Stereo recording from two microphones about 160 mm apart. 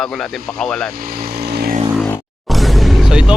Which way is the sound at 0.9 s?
65° right (ahead or behind).